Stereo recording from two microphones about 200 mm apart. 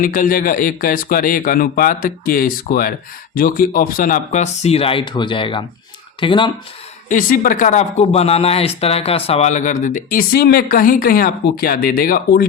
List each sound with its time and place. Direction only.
0.0 s speech: 45° left (ahead or behind); by 6.5 s 25° left (ahead or behind)
7.1 s speech: 45° left (ahead or behind)